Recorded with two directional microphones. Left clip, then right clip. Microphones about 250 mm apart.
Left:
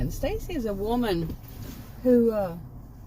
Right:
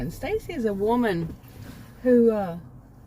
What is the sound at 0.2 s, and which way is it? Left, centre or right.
Speech, right.